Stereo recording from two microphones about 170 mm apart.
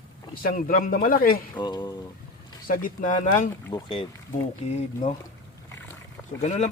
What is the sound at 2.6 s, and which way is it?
Speech, 55° left (ahead or behind).